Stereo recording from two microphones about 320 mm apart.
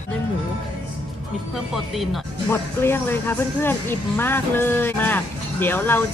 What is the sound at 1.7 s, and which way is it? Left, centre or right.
Speech, centre.